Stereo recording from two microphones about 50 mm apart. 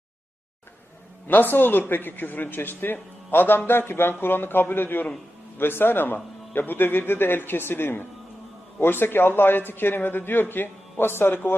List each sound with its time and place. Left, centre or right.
1.3 s a man's voice: left